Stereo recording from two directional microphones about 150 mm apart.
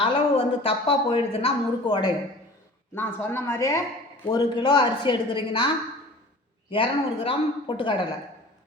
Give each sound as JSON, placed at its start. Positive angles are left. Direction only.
{"t": 0.0, "sound": "a woman's voice", "side_deg": 35}
{"t": 2.9, "sound": "speech", "side_deg": 15}
{"t": 4.3, "sound": "a woman's voice", "side_deg": 30}